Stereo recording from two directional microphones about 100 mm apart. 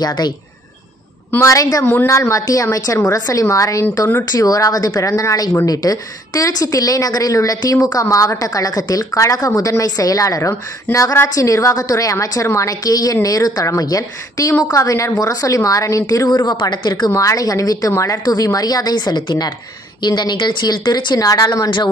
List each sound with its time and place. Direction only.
0.0 s a woman's voice: 45° left (ahead or behind)
1.3 s a woman's voice: 30° left (ahead or behind)
1.9 s a woman's voice: 20° left (ahead or behind)
2.1 s a woman's voice: 35° left (ahead or behind)
17.1 s a woman's voice: 30° left (ahead or behind); by 21.8 s 50° left (ahead or behind)